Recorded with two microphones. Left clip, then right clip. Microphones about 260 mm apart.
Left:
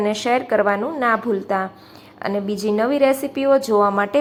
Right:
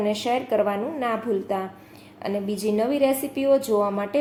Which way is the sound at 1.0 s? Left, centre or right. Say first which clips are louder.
Left 6 dB; centre.